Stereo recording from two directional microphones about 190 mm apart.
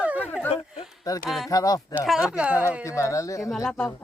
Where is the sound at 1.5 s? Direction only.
20° left (ahead or behind).